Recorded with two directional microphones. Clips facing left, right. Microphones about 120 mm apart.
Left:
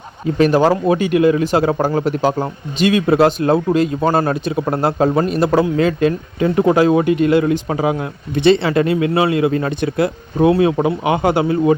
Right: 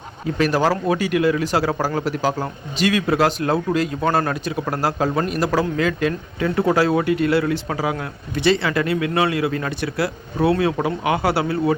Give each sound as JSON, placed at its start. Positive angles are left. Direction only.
{"t": 0.3, "sound": "speech", "side_deg": 20}
{"t": 6.6, "sound": "speech", "side_deg": 20}